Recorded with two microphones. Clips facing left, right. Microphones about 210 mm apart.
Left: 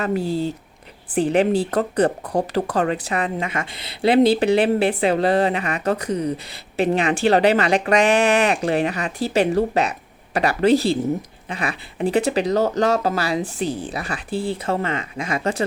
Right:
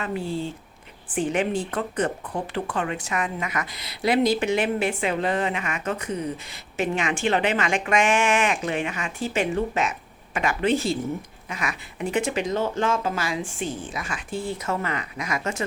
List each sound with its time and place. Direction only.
0.0 s speech: 40° left (ahead or behind)